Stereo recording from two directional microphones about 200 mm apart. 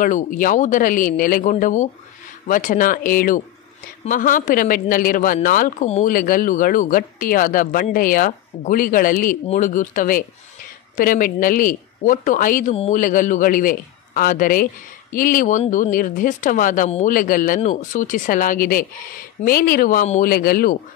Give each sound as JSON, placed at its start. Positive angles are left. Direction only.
{"t": 0.0, "sound": "speech", "side_deg": 40}